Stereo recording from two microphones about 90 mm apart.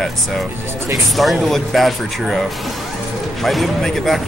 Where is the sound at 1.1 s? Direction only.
Centre (ahead or behind).